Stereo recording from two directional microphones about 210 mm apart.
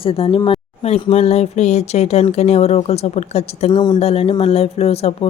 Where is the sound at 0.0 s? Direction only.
25° left (ahead or behind).